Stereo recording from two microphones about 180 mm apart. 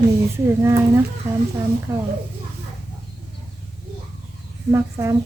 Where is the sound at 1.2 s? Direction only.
15° right (ahead or behind).